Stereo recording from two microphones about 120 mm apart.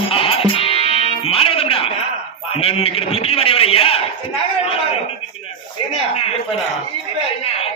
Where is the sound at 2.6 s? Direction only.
55° left (ahead or behind).